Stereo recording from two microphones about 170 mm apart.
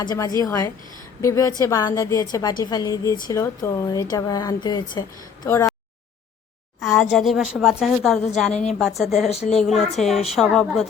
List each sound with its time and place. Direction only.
0.0 s a woman's voice: 25° left (ahead or behind)
6.7 s a woman's voice: centre (ahead or behind)
9.3 s speech: 40° left (ahead or behind)
9.6 s a woman's voice: centre (ahead or behind)